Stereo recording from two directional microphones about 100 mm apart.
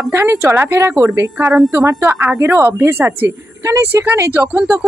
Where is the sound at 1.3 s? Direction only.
5° right (ahead or behind).